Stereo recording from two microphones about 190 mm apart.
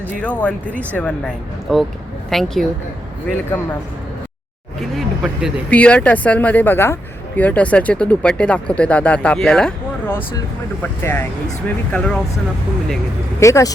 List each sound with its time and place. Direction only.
0.2 s a woman's voice: 5° left (ahead or behind)
4.9 s a woman's voice: centre (ahead or behind)
13.4 s speech: 15° left (ahead or behind)